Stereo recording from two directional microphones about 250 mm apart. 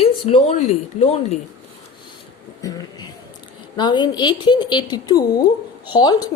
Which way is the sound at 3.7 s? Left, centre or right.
Centre.